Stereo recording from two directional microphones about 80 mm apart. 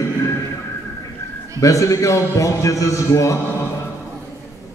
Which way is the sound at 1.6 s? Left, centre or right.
Left.